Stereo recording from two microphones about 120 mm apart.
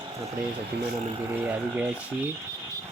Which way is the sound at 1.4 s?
15° right (ahead or behind).